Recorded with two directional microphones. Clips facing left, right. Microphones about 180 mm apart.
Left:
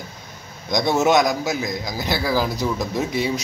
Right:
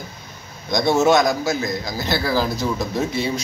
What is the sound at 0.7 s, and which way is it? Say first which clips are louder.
A man's voice: right 2 dB; 15° left (ahead or behind).